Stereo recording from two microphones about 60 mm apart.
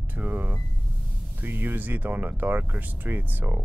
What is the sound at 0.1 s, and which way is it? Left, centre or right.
Speech, right.